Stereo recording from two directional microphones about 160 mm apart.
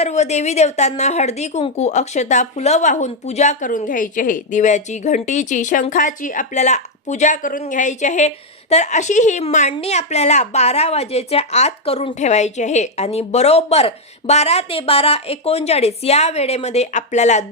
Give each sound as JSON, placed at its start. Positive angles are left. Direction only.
{"t": 0.0, "sound": "a woman's voice", "side_deg": 45}